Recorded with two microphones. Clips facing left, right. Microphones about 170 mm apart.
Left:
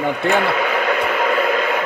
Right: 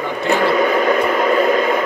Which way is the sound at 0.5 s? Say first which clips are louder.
Right 5 dB; 40° right (ahead or behind).